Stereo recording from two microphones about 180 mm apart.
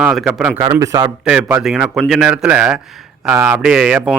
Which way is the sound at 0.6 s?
20° right (ahead or behind).